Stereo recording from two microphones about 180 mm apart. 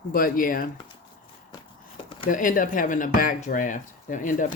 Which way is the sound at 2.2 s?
45° left (ahead or behind).